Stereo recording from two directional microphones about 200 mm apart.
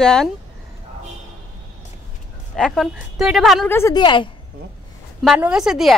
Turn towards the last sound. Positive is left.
turn(degrees=-5)  # may be behind; listen again after turning